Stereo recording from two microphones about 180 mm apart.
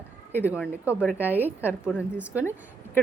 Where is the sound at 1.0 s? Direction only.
10° left (ahead or behind).